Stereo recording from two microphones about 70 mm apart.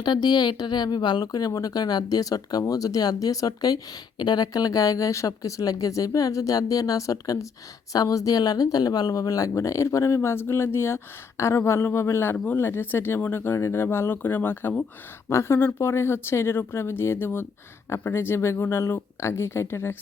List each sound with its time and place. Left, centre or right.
0.0 s a woman's voice: left
4.2 s speech: left
10.2 s speech: left